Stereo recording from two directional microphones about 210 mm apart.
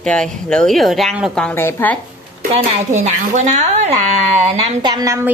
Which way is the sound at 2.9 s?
35° right (ahead or behind).